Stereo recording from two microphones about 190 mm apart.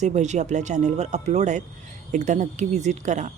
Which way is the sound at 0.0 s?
40° right (ahead or behind).